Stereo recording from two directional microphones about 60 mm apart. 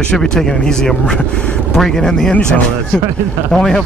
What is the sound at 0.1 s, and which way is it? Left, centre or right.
Speech, centre.